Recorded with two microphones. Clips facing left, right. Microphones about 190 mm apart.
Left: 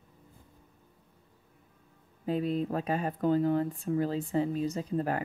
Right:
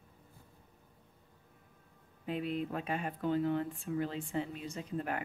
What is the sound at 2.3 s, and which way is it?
Speech, 35° left (ahead or behind).